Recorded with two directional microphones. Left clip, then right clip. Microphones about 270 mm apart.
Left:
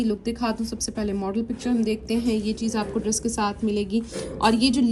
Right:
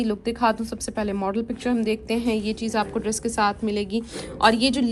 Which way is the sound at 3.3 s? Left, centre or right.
Centre.